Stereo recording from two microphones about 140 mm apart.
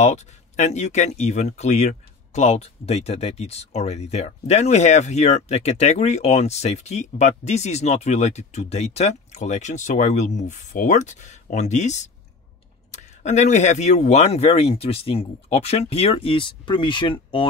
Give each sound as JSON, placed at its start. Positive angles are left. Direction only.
{"t": 0.0, "sound": "speech", "side_deg": 55}